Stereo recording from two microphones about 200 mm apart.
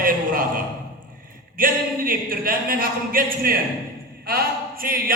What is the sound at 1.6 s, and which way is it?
Speech, 45° right (ahead or behind).